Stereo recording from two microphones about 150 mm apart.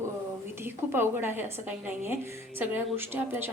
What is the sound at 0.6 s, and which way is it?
A woman's voice, 15° right (ahead or behind).